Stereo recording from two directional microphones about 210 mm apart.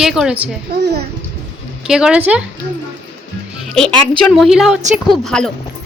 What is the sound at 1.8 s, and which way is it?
Speech, 5° right (ahead or behind).